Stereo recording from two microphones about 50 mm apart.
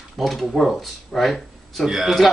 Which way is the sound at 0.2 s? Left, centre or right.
Centre.